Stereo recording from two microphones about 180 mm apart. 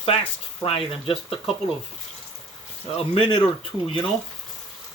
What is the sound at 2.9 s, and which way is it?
Speech, 30° left (ahead or behind).